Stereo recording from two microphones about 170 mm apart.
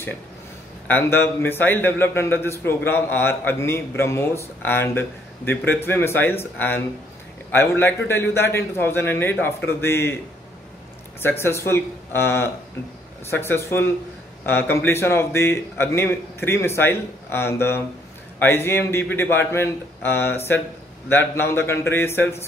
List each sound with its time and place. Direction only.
0.8 s a man's voice: 10° left (ahead or behind)
11.1 s a man's voice: 15° left (ahead or behind)